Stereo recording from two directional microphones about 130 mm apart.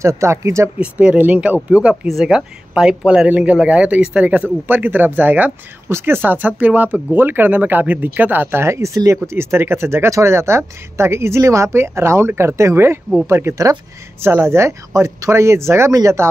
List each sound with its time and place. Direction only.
0.0 s speech: 20° right (ahead or behind)
0.7 s speech: 10° right (ahead or behind)